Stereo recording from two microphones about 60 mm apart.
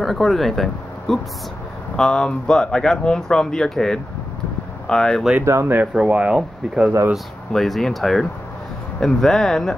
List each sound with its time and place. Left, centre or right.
0.0 s speech: centre
5.4 s speech: right
5.9 s speech: centre
7.5 s speech: centre